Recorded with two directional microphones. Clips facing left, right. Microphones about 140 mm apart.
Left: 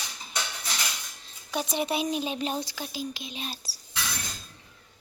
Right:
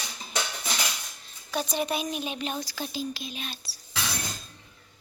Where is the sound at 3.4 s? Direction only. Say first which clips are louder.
Left 2 dB; 40° left (ahead or behind).